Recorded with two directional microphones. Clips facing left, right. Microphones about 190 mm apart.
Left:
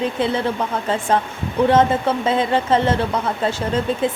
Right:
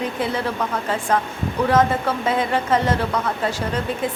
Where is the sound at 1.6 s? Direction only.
25° left (ahead or behind).